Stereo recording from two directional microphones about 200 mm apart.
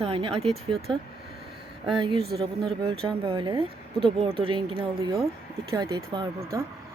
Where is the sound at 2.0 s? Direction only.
25° right (ahead or behind).